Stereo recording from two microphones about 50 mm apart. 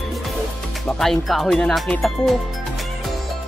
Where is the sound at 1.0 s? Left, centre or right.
Centre.